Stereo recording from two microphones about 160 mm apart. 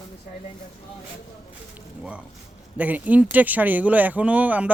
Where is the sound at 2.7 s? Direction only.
10° right (ahead or behind).